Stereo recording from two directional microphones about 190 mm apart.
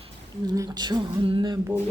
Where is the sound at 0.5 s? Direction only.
20° right (ahead or behind).